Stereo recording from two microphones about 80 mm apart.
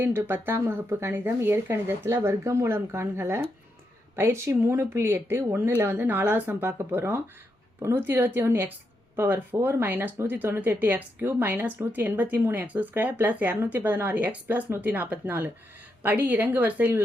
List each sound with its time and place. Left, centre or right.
0.0 s speech: right